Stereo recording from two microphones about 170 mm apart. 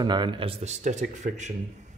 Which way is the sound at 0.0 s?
25° right (ahead or behind).